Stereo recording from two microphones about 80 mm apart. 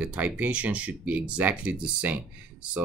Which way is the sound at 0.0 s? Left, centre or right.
Centre.